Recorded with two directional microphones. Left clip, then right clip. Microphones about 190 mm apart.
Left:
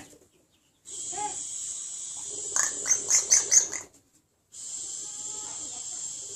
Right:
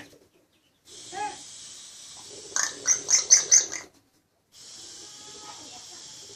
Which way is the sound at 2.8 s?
10° left (ahead or behind).